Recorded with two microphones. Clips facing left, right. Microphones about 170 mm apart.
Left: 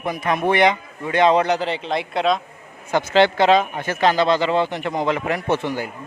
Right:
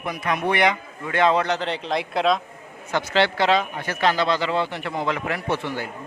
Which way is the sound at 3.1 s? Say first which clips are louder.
Left 5 dB; 20° left (ahead or behind).